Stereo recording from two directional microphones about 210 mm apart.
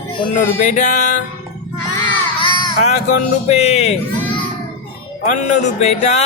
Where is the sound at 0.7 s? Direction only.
35° left (ahead or behind).